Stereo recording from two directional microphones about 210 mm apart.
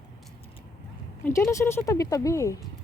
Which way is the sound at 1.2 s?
15° left (ahead or behind).